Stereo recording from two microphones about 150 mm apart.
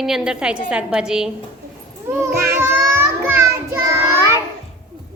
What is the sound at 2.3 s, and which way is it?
Child singing, 90° right.